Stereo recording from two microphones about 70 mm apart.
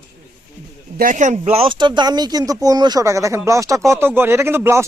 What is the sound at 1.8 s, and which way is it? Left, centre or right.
Speech, right.